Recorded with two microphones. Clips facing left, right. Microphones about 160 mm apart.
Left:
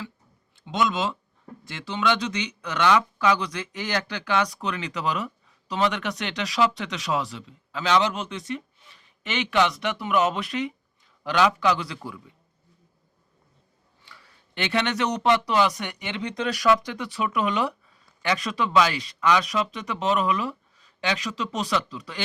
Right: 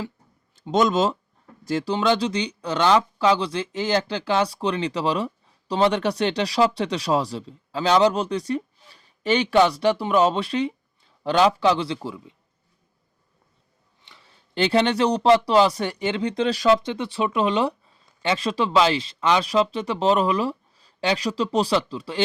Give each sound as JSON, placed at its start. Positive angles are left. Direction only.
{"t": 0.5, "sound": "a man's voice", "side_deg": -40}
{"t": 14.0, "sound": "speech", "side_deg": -25}